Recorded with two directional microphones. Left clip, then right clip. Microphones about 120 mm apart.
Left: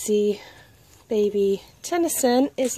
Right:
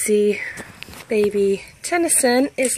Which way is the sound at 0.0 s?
5° left (ahead or behind).